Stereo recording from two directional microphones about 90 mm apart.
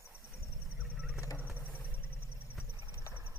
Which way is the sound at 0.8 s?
15° right (ahead or behind).